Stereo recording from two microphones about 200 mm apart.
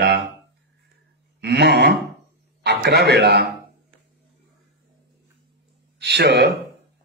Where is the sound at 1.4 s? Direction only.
60° right (ahead or behind).